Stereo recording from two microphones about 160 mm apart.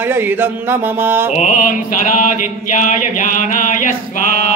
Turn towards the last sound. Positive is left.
turn(degrees=55)  # may be behind; listen again after turning